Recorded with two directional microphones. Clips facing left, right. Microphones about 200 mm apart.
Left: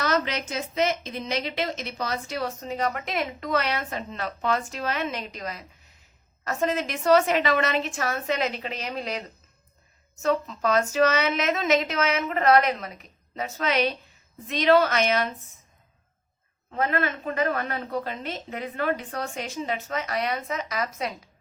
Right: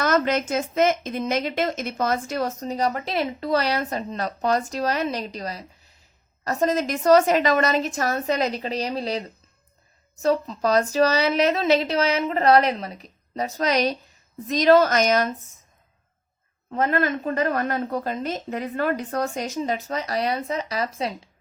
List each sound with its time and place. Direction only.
0.0 s a woman's voice: 50° right (ahead or behind)
16.7 s a woman's voice: 40° right (ahead or behind)